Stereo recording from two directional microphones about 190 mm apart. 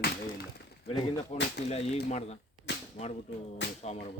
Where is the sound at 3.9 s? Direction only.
35° left (ahead or behind).